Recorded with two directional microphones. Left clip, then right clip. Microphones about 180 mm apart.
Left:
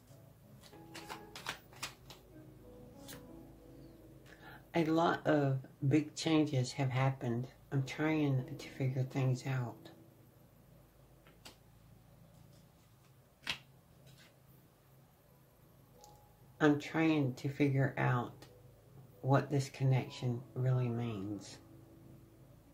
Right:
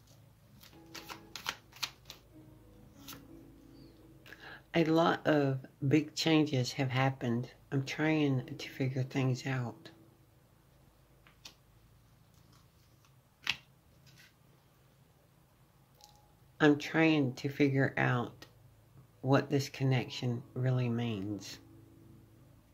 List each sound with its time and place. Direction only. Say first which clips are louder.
4.2 s speech: right 7 dB; 40° right (ahead or behind)
16.5 s speech: right 4 dB; 45° right (ahead or behind)